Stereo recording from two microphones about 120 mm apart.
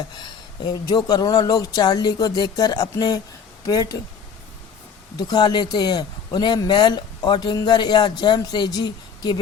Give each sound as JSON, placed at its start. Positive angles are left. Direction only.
{"t": 0.2, "sound": "a man's voice", "side_deg": 35}
{"t": 5.1, "sound": "a man's voice", "side_deg": 35}